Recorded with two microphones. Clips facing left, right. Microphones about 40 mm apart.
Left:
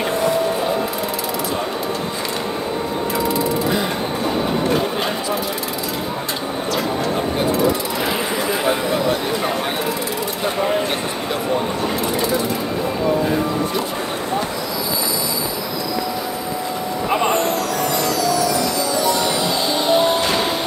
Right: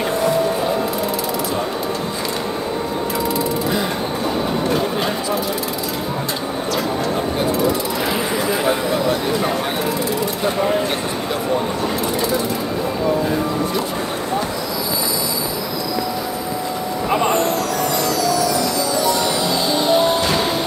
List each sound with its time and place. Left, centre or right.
0.2 s music: left
8.5 s a sound: left
17.1 s vehicle: left
18.2 s music: left